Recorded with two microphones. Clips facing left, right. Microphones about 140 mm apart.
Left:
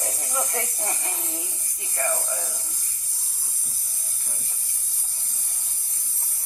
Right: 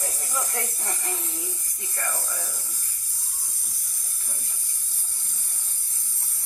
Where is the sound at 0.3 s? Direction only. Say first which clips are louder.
Left 3 dB; 20° left (ahead or behind).